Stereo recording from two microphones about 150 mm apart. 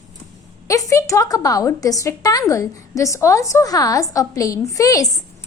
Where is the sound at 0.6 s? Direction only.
20° left (ahead or behind).